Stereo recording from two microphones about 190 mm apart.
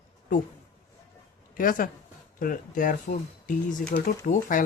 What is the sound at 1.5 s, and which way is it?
Speech, 45° left (ahead or behind).